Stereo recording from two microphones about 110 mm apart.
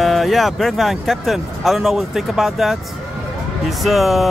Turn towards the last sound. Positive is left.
turn(degrees=0)  # may be behind; listen again after turning